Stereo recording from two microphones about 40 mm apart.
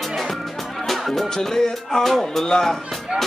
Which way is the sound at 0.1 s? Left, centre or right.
Centre.